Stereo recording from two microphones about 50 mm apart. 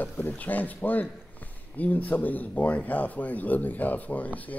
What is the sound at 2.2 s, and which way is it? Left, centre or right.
Speech, left.